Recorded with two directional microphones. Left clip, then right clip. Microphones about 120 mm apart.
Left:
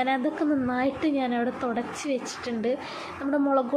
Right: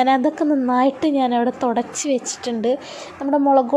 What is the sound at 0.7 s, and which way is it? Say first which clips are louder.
A woman's voice: right 8 dB; 40° right (ahead or behind).